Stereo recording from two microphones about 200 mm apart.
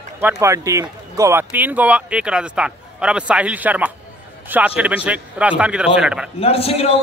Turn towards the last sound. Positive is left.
turn(degrees=30)  # may be behind; listen again after turning